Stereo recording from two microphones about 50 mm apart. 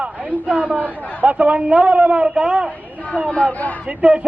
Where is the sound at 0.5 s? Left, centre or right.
Right.